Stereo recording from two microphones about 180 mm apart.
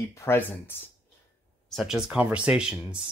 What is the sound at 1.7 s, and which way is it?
Speech, centre (ahead or behind).